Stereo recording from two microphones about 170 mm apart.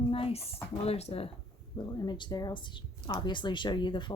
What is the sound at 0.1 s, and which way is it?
Speech, 35° left (ahead or behind).